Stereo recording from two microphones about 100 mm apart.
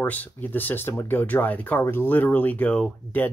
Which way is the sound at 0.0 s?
15° left (ahead or behind).